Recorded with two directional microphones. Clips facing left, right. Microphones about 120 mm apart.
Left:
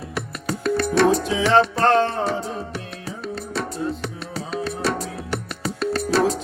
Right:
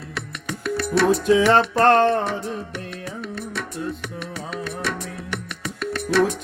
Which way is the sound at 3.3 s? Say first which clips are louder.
Left 2 dB; 35° left (ahead or behind).